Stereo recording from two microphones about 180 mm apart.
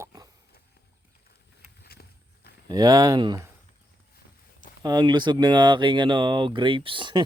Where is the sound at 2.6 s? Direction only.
20° right (ahead or behind).